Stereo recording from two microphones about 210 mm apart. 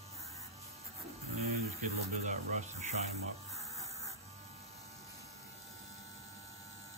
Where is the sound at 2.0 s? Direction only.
35° right (ahead or behind).